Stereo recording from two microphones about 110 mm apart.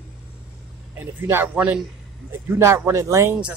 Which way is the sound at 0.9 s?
20° right (ahead or behind).